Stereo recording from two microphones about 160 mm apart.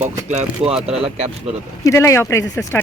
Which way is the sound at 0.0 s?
45° right (ahead or behind).